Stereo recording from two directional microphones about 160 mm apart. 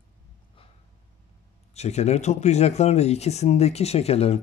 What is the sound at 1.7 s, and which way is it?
Speech, 45° left (ahead or behind).